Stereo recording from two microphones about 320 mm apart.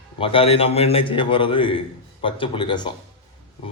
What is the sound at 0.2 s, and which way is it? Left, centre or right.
Speech, centre.